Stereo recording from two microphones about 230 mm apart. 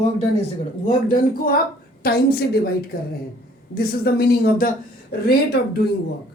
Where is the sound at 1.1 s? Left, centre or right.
Left.